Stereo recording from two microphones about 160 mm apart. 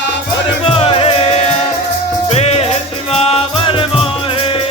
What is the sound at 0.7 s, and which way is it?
Music, 35° left (ahead or behind).